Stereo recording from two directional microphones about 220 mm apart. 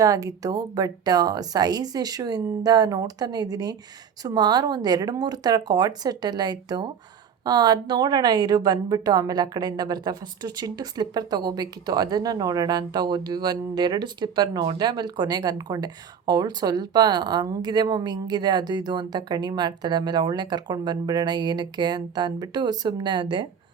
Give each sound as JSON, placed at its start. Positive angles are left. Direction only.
{"t": 0.0, "sound": "a woman's voice", "side_deg": -15}